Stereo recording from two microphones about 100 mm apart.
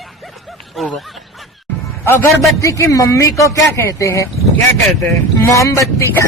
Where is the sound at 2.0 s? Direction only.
25° left (ahead or behind).